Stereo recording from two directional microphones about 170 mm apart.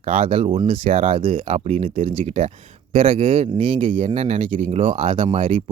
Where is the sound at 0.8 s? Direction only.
50° right (ahead or behind).